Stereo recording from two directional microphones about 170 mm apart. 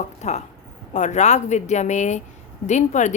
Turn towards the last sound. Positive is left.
turn(degrees=45)  # may be behind; listen again after turning